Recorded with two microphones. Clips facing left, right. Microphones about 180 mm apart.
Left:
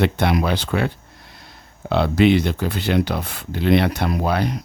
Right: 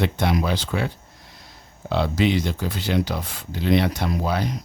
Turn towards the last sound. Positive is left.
turn(degrees=60)  # may be behind; listen again after turning